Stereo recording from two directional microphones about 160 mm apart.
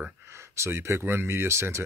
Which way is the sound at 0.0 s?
15° right (ahead or behind).